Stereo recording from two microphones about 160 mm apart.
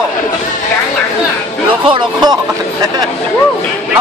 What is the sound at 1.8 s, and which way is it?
Speech, 30° right (ahead or behind).